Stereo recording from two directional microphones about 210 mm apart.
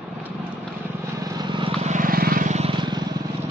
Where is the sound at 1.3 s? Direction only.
20° right (ahead or behind).